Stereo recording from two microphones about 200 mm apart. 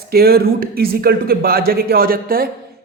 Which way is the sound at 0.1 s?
50° right (ahead or behind).